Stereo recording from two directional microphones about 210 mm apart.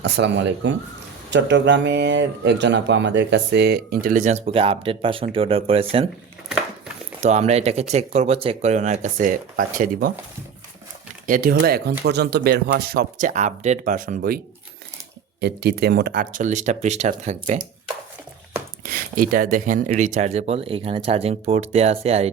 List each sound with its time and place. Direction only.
0.0 s speech: 55° right (ahead or behind); by 6.1 s 25° right (ahead or behind)
7.2 s speech: 35° right (ahead or behind)
11.3 s speech: 40° right (ahead or behind)
15.4 s speech: 50° right (ahead or behind); by 17.6 s 35° right (ahead or behind)
18.9 s speech: 45° right (ahead or behind)